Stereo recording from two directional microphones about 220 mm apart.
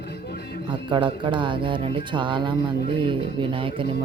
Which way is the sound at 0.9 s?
20° right (ahead or behind).